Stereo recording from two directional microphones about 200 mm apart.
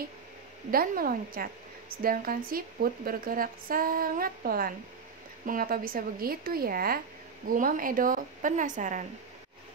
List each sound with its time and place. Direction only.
0.7 s a woman's voice: 45° right (ahead or behind)